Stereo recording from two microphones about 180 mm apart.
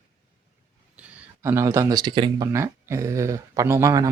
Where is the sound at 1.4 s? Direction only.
15° right (ahead or behind).